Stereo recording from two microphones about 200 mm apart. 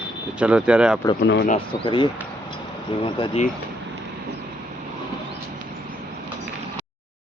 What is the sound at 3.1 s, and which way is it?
Speech, 25° left (ahead or behind).